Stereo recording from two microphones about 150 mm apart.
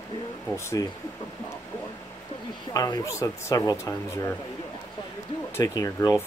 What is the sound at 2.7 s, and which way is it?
Speech, 25° left (ahead or behind).